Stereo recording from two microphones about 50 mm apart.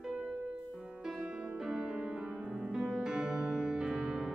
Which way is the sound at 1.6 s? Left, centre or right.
Centre.